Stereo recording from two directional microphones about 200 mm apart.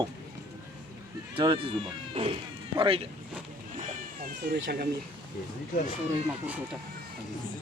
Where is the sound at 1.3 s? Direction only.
25° right (ahead or behind).